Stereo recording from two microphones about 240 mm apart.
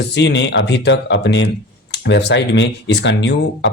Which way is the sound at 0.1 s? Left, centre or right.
Left.